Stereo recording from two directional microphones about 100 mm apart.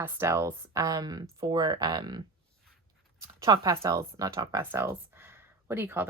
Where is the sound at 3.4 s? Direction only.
40° right (ahead or behind).